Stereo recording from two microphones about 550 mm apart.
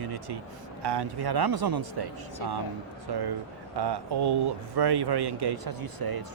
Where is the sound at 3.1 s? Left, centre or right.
Right.